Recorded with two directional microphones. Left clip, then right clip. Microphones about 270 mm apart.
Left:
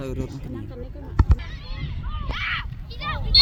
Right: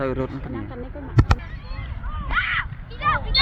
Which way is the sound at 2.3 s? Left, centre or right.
Left.